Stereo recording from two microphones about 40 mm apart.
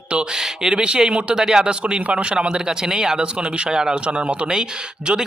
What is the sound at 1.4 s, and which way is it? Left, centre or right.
A man's voice, centre.